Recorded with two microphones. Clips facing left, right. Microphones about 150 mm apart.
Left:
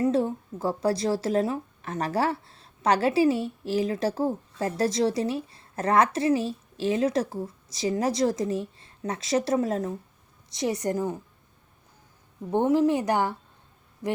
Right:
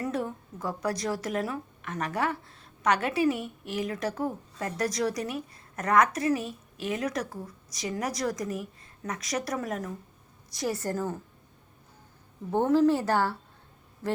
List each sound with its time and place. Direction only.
0.0 s speech: 30° left (ahead or behind)
12.5 s a woman's voice: 15° left (ahead or behind)